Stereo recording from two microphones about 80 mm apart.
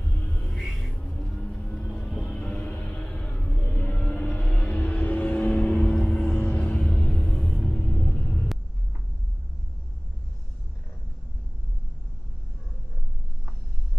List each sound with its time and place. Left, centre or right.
0.0 s music: left
0.6 s music: centre
2.8 s vehicle: centre